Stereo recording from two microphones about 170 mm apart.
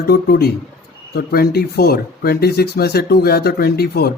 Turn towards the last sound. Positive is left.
turn(degrees=65)  # may be behind; listen again after turning